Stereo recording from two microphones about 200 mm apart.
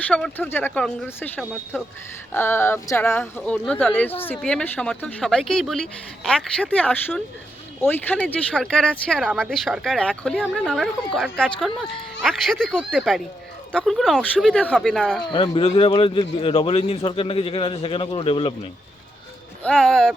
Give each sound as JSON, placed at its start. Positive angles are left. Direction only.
{"t": 0.1, "sound": "speech", "side_deg": 5}
{"t": 15.2, "sound": "speech", "side_deg": 25}
{"t": 19.6, "sound": "speech", "side_deg": 0}